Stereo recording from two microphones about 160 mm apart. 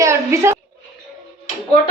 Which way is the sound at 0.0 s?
15° right (ahead or behind).